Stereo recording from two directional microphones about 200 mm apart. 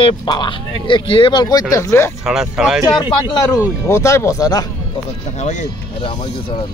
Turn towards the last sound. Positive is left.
turn(degrees=35)  # may be behind; listen again after turning